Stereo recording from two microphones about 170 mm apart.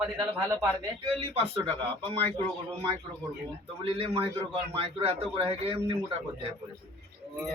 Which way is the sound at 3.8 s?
35° right (ahead or behind).